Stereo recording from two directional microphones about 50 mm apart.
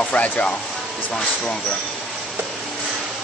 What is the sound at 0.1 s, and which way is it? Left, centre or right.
Speech, left.